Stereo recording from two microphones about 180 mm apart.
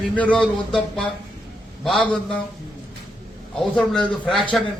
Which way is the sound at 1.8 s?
5° left (ahead or behind).